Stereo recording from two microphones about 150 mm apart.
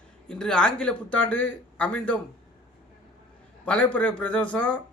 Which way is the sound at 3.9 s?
10° left (ahead or behind).